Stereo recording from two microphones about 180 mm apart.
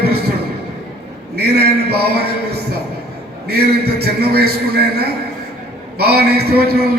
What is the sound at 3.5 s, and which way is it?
A man's voice, 65° right (ahead or behind).